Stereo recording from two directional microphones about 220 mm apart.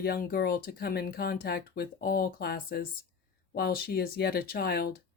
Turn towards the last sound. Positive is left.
turn(degrees=45)  # may be behind; listen again after turning